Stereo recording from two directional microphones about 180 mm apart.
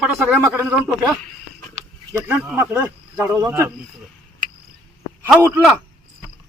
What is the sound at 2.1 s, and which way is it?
A man's voice, 15° right (ahead or behind).